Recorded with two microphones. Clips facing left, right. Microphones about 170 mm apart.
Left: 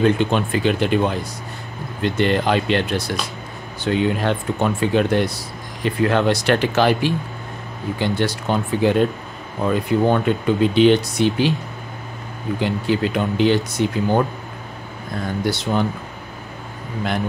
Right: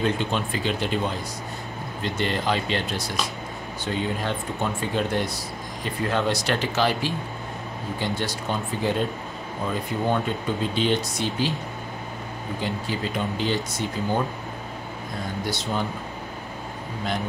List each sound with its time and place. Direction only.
0.0 s speech: 60° left (ahead or behind)
12.5 s speech: 70° left (ahead or behind)
15.4 s speech: 65° left (ahead or behind)